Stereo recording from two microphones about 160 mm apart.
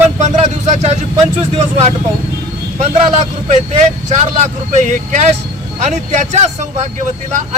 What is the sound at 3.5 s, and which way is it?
Speech, 50° right (ahead or behind).